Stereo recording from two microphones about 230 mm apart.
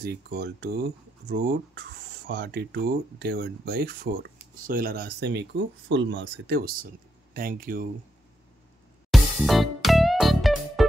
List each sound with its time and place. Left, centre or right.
0.0 s speech: right
9.1 s music: centre